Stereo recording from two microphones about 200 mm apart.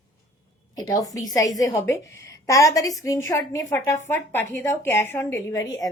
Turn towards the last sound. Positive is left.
turn(degrees=15)  # may be behind; listen again after turning